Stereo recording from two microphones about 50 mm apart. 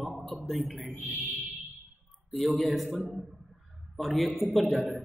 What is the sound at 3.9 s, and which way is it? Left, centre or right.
Speech, centre.